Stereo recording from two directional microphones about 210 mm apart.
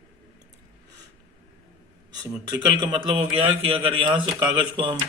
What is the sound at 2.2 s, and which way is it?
A man's voice, 20° right (ahead or behind).